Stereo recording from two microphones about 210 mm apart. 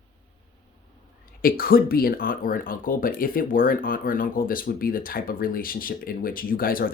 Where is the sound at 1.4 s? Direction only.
45° left (ahead or behind).